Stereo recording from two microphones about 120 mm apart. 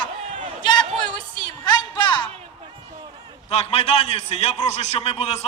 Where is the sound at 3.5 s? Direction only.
55° left (ahead or behind).